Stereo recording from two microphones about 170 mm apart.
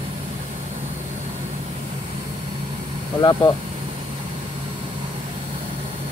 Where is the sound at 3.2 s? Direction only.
25° left (ahead or behind).